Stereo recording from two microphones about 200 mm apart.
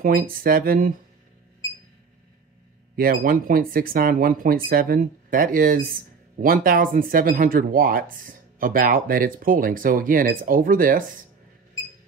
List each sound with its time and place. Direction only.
0.0 s speech: 45° right (ahead or behind)
3.0 s speech: 45° right (ahead or behind)